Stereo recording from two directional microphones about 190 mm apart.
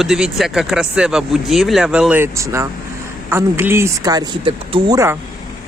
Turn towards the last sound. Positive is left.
turn(degrees=-15)  # may be behind; listen again after turning